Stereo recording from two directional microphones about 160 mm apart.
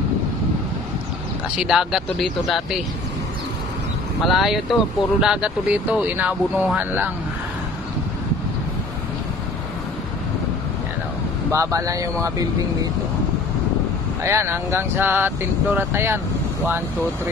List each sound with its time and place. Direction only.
1.6 s speech: 5° right (ahead or behind)
4.2 s speech: centre (ahead or behind)
11.5 s speech: 20° right (ahead or behind)
14.2 s speech: 15° right (ahead or behind)